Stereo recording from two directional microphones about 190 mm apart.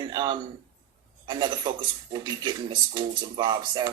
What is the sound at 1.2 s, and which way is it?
Speech, 25° right (ahead or behind).